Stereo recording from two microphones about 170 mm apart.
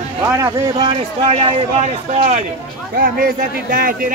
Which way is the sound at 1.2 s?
35° right (ahead or behind).